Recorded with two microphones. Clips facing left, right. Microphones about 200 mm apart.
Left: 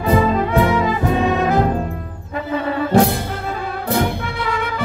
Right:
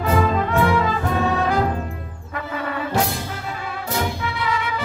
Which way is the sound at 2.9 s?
60° left (ahead or behind).